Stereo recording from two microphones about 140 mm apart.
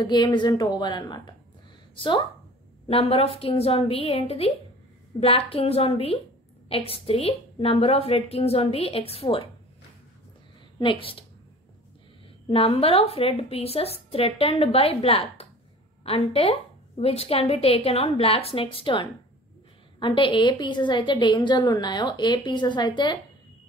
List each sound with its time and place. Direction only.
0.0 s a woman's voice: 30° left (ahead or behind)
2.9 s a woman's voice: 45° left (ahead or behind)
10.8 s a woman's voice: 40° left (ahead or behind)
12.4 s a woman's voice: 40° left (ahead or behind)